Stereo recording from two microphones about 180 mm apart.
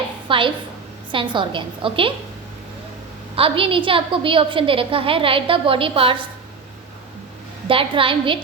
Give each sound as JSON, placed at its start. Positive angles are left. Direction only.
{"t": 0.3, "sound": "a woman's voice", "side_deg": -30}
{"t": 3.3, "sound": "a woman's voice", "side_deg": -30}
{"t": 7.7, "sound": "a woman's voice", "side_deg": -30}